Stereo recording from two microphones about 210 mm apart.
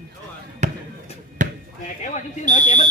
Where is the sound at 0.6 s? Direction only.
35° right (ahead or behind).